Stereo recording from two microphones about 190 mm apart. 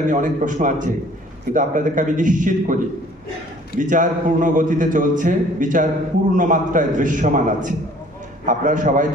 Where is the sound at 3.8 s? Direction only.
45° right (ahead or behind).